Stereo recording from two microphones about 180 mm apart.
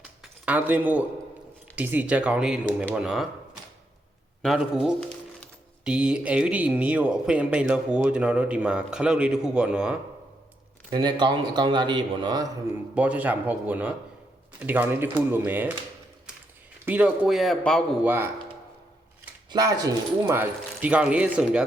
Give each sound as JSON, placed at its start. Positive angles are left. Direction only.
{"t": 0.2, "sound": "speech", "side_deg": -10}
{"t": 4.4, "sound": "speech", "side_deg": 0}
{"t": 10.9, "sound": "a man's voice", "side_deg": -25}
{"t": 12.9, "sound": "speech", "side_deg": -5}
{"t": 16.8, "sound": "speech", "side_deg": -10}
{"t": 18.0, "sound": "speech", "side_deg": -10}
{"t": 19.5, "sound": "speech", "side_deg": -20}